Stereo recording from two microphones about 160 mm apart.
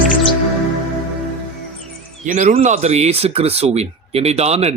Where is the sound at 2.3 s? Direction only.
55° right (ahead or behind).